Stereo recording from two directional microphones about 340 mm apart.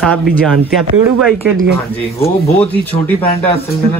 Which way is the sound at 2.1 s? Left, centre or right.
Centre.